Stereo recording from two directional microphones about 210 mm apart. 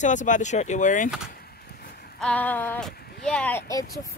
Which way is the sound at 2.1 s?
5° left (ahead or behind).